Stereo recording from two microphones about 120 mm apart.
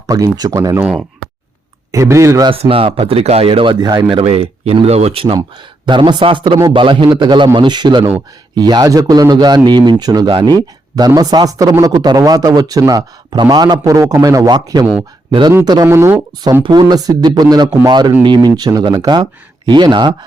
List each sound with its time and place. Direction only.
0.1 s speech: 30° right (ahead or behind)
1.9 s speech: 25° right (ahead or behind)
2.5 s speech: 50° right (ahead or behind); by 4.2 s 35° right (ahead or behind)
4.2 s a man's voice: 55° right (ahead or behind); by 15.9 s 35° right (ahead or behind)
15.9 s a man's voice: 20° right (ahead or behind); by 20.1 s 40° right (ahead or behind)